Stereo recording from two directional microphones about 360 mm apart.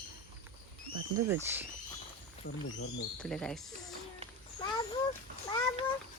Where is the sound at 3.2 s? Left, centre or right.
Centre.